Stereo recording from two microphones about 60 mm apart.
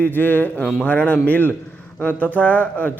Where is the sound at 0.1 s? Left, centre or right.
Left.